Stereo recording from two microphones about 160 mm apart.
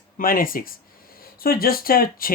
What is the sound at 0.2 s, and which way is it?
Speech, 60° left (ahead or behind).